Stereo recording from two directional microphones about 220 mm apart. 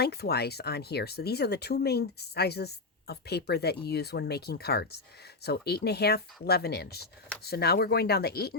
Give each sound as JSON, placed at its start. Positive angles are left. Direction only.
{"t": 0.0, "sound": "speech", "side_deg": 45}